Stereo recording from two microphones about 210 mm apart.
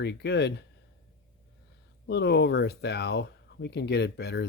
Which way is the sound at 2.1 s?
55° left (ahead or behind).